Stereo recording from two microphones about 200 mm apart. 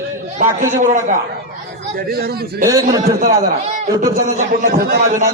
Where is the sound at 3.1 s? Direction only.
45° right (ahead or behind).